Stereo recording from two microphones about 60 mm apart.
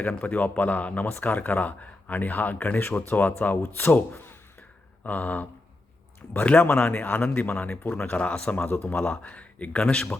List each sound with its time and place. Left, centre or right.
0.0 s speech: left